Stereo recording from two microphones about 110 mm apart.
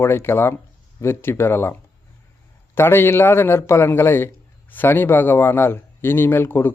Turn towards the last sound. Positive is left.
turn(degrees=20)  # may be behind; listen again after turning